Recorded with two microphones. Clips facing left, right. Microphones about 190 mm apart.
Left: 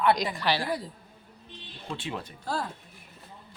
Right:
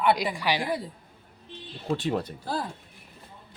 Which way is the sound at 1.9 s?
40° right (ahead or behind).